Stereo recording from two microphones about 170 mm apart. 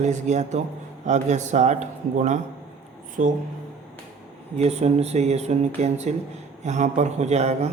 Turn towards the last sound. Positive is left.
turn(degrees=-40)  # may be behind; listen again after turning